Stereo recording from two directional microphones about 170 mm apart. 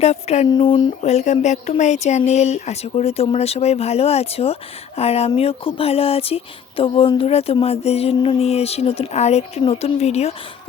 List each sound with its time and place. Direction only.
0.0 s speech: 40° left (ahead or behind)
0.5 s speech: 30° left (ahead or behind)
1.0 s speech: 40° left (ahead or behind)